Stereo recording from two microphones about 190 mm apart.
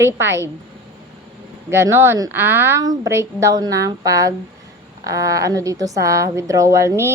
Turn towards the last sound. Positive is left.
turn(degrees=-15)  # may be behind; listen again after turning